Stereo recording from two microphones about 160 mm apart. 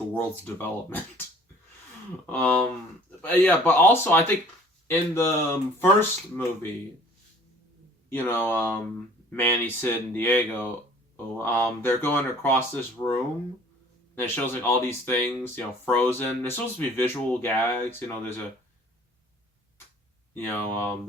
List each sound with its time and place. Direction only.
0.1 s speech: 10° left (ahead or behind)
2.3 s speech: 10° left (ahead or behind)
8.1 s speech: 15° left (ahead or behind)
13.0 s speech: 25° left (ahead or behind)
14.2 s speech: 15° left (ahead or behind)
20.3 s speech: 15° left (ahead or behind)